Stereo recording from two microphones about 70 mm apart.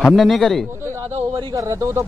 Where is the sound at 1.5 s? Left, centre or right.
Right.